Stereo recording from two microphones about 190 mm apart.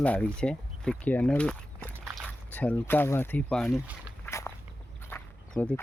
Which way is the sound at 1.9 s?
5° right (ahead or behind).